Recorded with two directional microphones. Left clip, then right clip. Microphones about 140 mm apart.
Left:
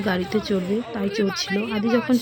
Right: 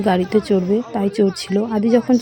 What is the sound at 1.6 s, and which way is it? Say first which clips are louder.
Speech: right 8 dB; 10° left (ahead or behind).